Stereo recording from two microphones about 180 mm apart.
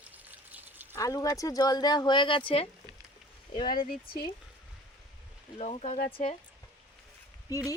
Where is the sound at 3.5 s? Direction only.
50° left (ahead or behind).